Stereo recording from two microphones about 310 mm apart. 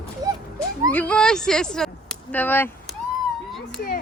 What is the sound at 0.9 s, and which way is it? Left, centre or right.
Speech, centre.